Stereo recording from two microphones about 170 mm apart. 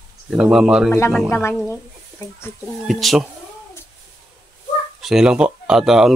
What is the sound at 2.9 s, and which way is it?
Speech, centre (ahead or behind).